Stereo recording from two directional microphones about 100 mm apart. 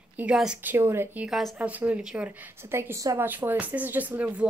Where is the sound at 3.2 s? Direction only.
20° right (ahead or behind).